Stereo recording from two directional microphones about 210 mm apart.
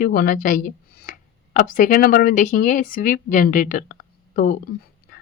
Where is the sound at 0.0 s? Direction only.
40° left (ahead or behind).